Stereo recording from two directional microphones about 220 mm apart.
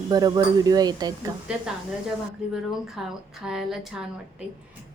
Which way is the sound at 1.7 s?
5° right (ahead or behind).